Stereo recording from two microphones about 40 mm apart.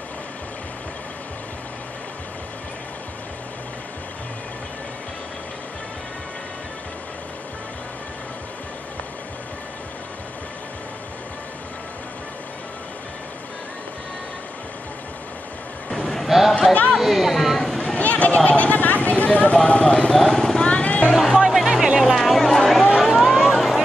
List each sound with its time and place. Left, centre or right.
15.9 s vehicle: centre
16.3 s a sound: centre
17.9 s a sound: left
20.2 s vehicle: centre
20.6 s vehicle: left
21.1 s music: centre
21.6 s music: centre
22.2 s a sound: centre
22.9 s vehicle: centre